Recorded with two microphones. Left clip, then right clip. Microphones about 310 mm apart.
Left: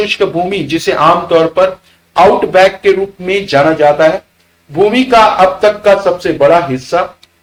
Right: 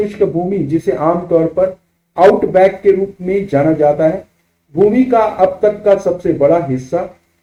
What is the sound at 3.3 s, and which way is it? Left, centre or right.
Speech, centre.